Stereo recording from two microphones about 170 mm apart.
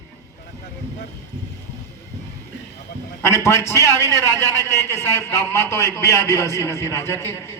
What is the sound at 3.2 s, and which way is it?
A man's voice, 15° left (ahead or behind).